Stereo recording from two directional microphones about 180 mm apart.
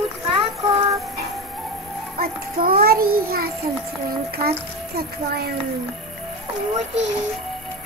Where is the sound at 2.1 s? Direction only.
55° right (ahead or behind).